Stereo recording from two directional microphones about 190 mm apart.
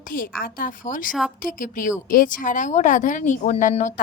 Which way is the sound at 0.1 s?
50° left (ahead or behind).